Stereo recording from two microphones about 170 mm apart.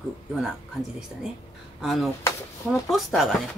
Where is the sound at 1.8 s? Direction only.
Centre (ahead or behind).